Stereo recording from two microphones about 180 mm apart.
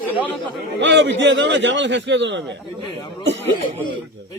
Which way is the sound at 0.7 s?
80° right.